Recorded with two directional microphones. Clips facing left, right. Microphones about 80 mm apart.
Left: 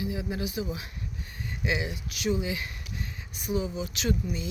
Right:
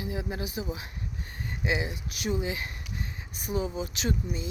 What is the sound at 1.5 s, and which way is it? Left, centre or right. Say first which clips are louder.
Speech: even; right.